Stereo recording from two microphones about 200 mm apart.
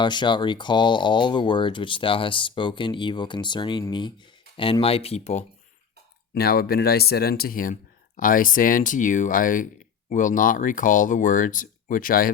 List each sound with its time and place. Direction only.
0.0 s speech: 25° left (ahead or behind)
6.3 s speech: 50° left (ahead or behind)